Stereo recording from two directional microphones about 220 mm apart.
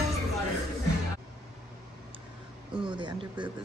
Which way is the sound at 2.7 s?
20° right (ahead or behind).